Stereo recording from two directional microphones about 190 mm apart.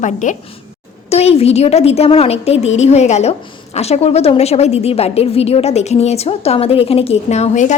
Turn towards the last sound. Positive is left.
turn(degrees=40)  # may be behind; listen again after turning